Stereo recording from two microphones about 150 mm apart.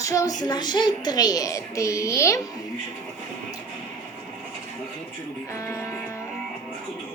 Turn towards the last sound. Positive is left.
turn(degrees=20)  # may be behind; listen again after turning